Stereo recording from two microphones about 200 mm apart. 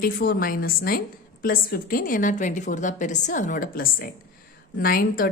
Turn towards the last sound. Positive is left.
turn(degrees=45)  # may be behind; listen again after turning